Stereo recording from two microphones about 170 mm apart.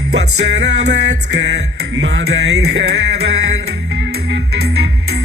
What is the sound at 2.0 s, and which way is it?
Music, 90° right.